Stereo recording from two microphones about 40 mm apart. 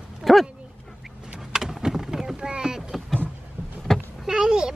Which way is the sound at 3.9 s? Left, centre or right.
Centre.